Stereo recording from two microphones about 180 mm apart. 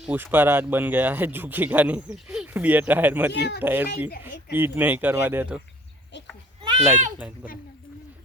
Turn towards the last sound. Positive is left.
turn(degrees=-10)  # may be behind; listen again after turning